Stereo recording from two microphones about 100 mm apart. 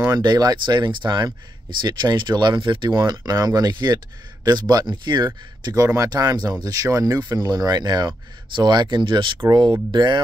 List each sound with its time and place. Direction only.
0.1 s speech: 45° right (ahead or behind)